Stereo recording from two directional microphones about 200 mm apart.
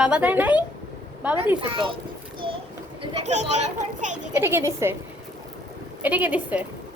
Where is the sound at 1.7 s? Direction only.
25° right (ahead or behind).